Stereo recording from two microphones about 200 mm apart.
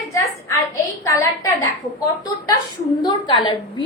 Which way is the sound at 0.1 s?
15° left (ahead or behind).